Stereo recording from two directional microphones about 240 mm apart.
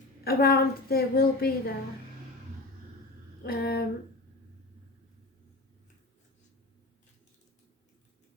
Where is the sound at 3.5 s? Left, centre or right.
Left.